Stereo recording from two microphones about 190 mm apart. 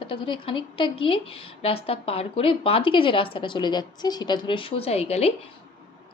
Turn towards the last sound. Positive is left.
turn(degrees=30)  # may be behind; listen again after turning